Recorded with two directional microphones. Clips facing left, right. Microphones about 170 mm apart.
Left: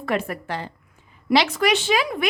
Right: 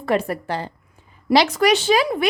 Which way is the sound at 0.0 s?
35° right (ahead or behind).